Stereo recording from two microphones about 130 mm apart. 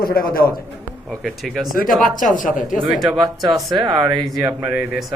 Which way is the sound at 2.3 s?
90° left.